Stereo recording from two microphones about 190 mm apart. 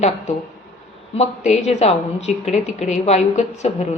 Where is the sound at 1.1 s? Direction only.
35° left (ahead or behind).